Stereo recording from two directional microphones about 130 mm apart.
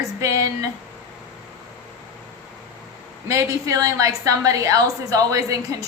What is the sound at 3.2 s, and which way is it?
A woman's voice, 25° right (ahead or behind).